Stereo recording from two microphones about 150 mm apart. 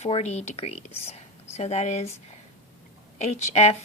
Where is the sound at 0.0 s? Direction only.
45° left (ahead or behind).